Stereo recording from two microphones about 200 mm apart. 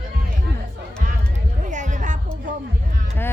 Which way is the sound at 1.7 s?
40° right (ahead or behind).